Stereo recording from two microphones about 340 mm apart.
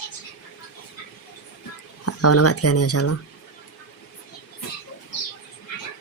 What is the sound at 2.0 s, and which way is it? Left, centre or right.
Speech, left.